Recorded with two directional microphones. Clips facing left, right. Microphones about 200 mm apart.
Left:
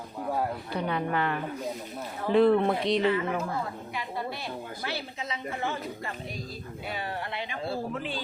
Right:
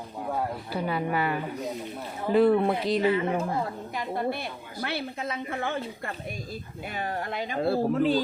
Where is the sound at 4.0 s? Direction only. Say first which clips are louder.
Right 6 dB; 55° right (ahead or behind).